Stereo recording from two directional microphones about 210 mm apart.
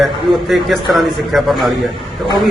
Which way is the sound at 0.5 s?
Centre (ahead or behind).